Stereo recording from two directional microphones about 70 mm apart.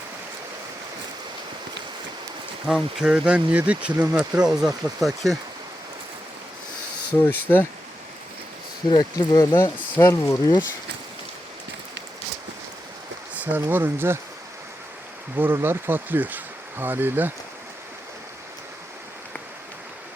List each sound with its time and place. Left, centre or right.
2.7 s speech: centre
7.1 s speech: left
9.0 s speech: left
10.0 s speech: left
13.3 s speech: right
15.4 s speech: right